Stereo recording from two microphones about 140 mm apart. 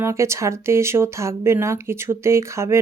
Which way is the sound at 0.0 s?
20° right (ahead or behind).